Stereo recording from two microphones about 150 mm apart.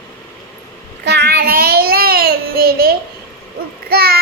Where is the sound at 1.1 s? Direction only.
90° right.